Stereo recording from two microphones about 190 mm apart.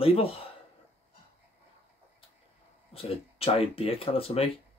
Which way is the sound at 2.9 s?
30° left (ahead or behind).